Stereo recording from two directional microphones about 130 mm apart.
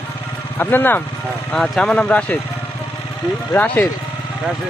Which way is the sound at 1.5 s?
5° left (ahead or behind).